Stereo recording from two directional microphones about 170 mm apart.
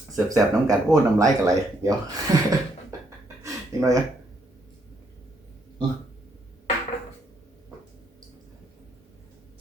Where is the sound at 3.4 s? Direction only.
20° right (ahead or behind).